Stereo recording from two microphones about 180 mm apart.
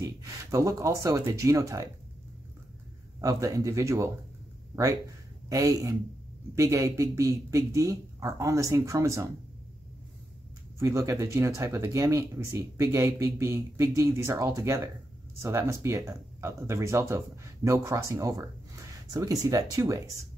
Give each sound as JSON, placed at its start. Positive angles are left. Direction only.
{"t": 0.0, "sound": "speech", "side_deg": -20}
{"t": 3.2, "sound": "speech", "side_deg": -20}
{"t": 5.5, "sound": "speech", "side_deg": -20}
{"t": 10.8, "sound": "speech", "side_deg": -15}